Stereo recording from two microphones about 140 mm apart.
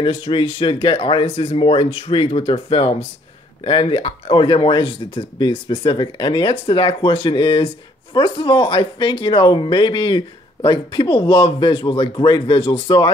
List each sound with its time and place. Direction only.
0.0 s speech: 35° left (ahead or behind)